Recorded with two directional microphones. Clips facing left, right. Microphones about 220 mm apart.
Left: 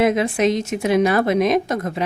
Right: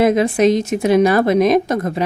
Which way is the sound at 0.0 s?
40° right (ahead or behind).